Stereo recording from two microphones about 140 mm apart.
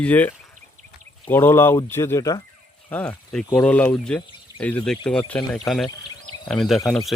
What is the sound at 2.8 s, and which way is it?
Speech, 10° left (ahead or behind).